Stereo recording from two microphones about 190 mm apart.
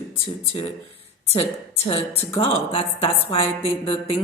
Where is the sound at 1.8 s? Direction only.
30° left (ahead or behind).